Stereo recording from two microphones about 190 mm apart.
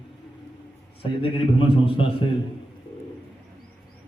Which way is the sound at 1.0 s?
30° left (ahead or behind).